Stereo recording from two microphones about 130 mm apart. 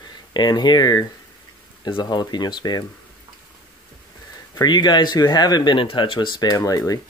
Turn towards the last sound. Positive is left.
turn(degrees=30)  # may be behind; listen again after turning